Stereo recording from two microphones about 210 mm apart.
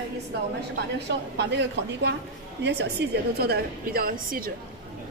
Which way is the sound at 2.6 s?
55° right (ahead or behind).